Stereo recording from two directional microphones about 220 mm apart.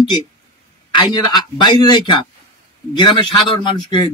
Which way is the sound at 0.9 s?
20° left (ahead or behind).